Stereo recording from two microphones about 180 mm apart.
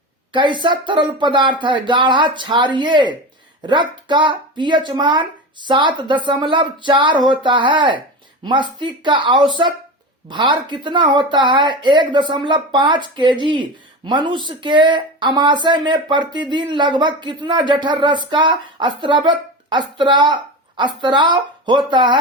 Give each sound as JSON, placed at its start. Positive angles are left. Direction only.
{"t": 0.3, "sound": "speech", "side_deg": -25}